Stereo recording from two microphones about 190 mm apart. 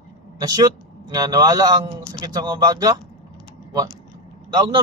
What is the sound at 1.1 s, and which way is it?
A man's voice, 20° right (ahead or behind).